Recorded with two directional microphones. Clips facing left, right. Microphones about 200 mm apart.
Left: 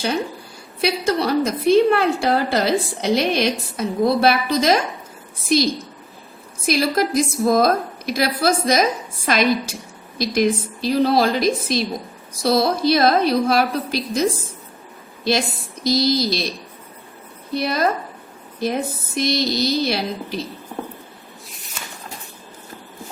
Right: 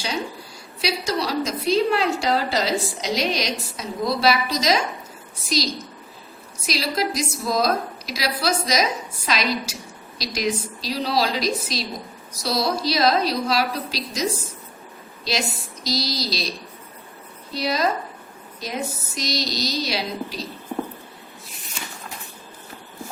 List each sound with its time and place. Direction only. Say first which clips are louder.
0.8 s a woman's voice: left 5 dB; 55° left (ahead or behind)